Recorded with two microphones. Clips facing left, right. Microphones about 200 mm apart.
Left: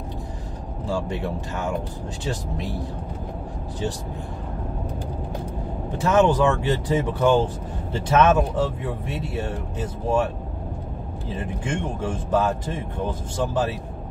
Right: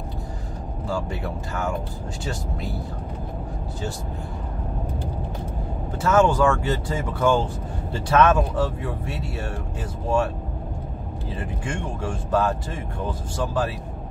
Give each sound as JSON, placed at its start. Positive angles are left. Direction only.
{"t": 6.0, "sound": "speech", "side_deg": 20}
{"t": 11.3, "sound": "speech", "side_deg": 20}